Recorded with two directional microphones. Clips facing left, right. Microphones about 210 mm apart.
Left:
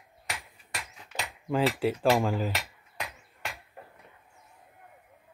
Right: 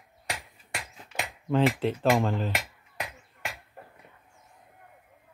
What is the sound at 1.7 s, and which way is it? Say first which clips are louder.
Speech: even; 5° left (ahead or behind).